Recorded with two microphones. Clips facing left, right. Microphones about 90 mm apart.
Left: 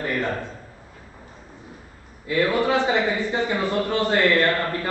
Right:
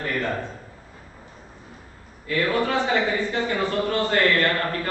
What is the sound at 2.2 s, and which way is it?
A man's voice, 15° left (ahead or behind).